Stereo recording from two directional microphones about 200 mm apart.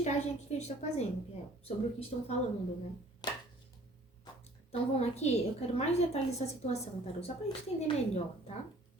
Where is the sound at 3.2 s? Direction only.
20° left (ahead or behind).